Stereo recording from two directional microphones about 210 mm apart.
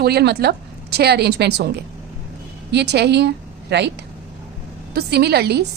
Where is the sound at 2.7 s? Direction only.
55° right (ahead or behind).